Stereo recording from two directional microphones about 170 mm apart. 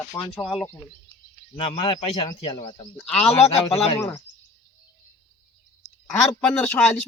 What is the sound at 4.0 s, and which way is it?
Speech, 20° left (ahead or behind).